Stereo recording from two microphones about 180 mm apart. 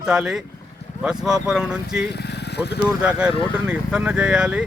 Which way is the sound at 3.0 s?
5° right (ahead or behind).